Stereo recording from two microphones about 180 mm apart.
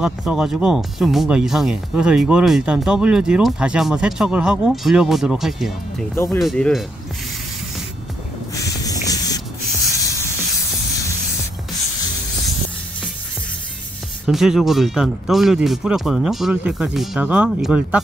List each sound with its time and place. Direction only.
0.0 s speech: 5° right (ahead or behind)
6.1 s speech: 15° left (ahead or behind)
6.4 s speech: centre (ahead or behind)
8.5 s spray: 20° left (ahead or behind)
14.2 s speech: centre (ahead or behind)